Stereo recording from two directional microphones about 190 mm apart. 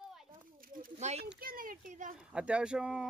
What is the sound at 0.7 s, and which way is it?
Speech, 40° right (ahead or behind).